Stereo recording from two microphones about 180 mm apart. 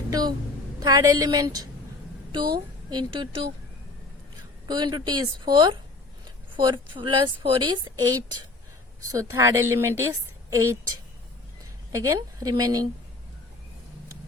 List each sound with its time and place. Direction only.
0.1 s a woman's voice: 20° right (ahead or behind)
4.7 s a woman's voice: 25° right (ahead or behind)